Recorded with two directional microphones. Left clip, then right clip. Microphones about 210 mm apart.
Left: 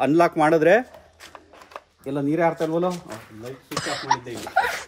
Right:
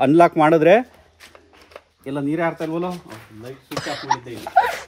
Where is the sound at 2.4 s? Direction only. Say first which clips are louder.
Left 3 dB; 25° right (ahead or behind).